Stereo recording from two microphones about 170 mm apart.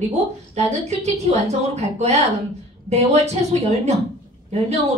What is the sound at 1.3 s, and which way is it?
Speech, 40° right (ahead or behind).